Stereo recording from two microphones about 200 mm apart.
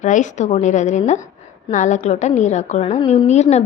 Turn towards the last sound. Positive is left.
turn(degrees=35)  # may be behind; listen again after turning